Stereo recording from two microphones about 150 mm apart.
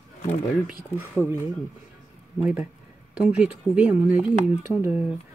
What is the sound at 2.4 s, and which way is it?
Speech, 10° right (ahead or behind).